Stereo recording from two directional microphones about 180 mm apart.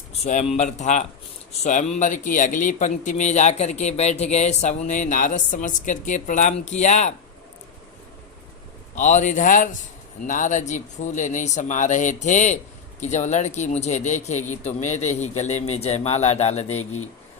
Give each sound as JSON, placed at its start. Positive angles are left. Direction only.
{"t": 0.1, "sound": "a sound", "side_deg": 40}
{"t": 0.5, "sound": "a man's voice", "side_deg": 40}
{"t": 9.0, "sound": "a man's voice", "side_deg": 45}